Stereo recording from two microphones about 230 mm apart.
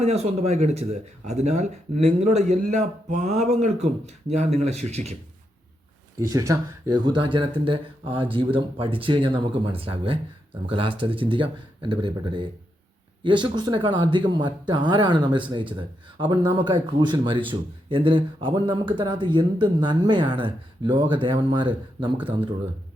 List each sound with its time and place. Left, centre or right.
0.0 s speech: right
6.1 s speech: centre